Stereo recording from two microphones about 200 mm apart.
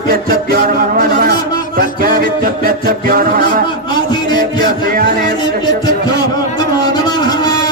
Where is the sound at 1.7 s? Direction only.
45° right (ahead or behind).